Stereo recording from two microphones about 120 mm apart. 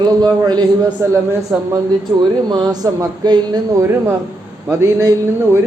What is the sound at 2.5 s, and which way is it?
A man's voice, 35° right (ahead or behind).